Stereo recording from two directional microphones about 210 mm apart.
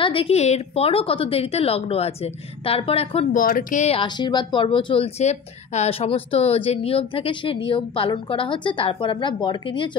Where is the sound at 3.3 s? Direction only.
40° left (ahead or behind).